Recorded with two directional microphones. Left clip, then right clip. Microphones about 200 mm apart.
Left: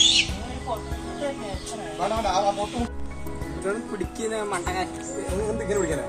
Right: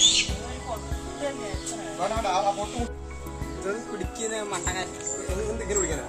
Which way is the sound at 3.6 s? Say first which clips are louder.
Left 3 dB; centre (ahead or behind).